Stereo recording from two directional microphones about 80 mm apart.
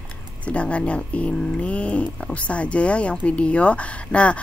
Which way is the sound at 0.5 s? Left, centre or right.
Centre.